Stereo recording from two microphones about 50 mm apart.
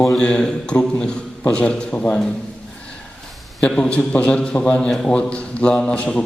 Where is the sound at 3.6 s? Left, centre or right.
Left.